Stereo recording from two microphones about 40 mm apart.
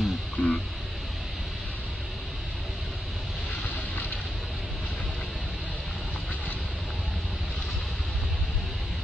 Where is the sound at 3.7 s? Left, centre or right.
Left.